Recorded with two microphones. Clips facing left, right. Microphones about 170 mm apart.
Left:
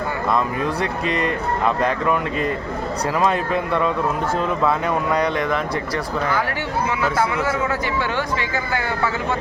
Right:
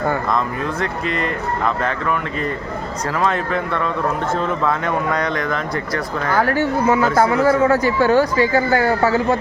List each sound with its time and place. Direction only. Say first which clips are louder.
0.3 s speech: even; 10° left (ahead or behind)
3.2 s speech: right 1 dB; 15° left (ahead or behind)
5.1 s speech: left 1 dB; 10° left (ahead or behind)
6.3 s a man's voice: right 6 dB; 45° right (ahead or behind)